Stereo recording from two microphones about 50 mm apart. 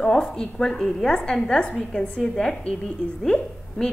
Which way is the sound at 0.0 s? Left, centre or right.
Centre.